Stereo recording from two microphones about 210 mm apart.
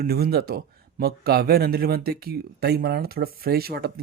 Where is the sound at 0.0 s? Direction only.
45° right (ahead or behind).